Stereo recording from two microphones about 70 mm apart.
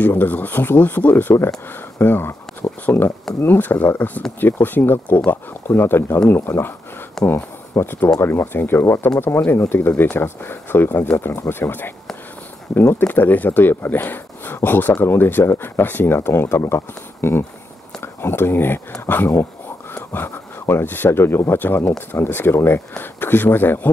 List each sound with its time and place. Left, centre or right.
0.0 s speech: left
2.6 s a sound: left
3.3 s speech: left
13.0 s speech: left